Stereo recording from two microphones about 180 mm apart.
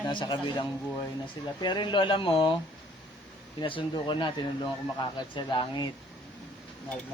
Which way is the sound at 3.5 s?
25° left (ahead or behind).